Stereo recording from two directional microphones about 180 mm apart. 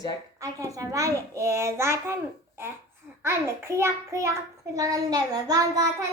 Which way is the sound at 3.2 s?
15° right (ahead or behind).